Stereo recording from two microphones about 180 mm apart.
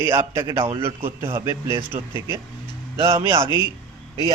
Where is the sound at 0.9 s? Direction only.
15° right (ahead or behind).